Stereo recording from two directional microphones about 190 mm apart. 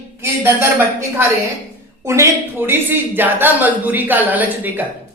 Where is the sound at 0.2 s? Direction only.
15° right (ahead or behind).